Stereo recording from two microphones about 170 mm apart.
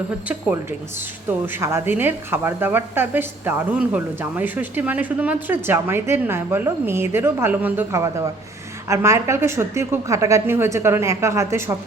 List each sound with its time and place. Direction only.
1.5 s speech: 15° right (ahead or behind)